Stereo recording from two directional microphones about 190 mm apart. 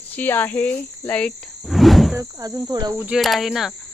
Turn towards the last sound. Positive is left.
turn(degrees=0)  # may be behind; listen again after turning